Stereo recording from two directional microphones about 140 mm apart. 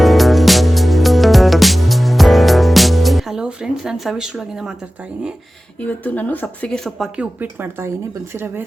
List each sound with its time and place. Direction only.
0.0 s music: centre (ahead or behind)
5.8 s speech: 10° left (ahead or behind)
7.2 s speech: 15° right (ahead or behind)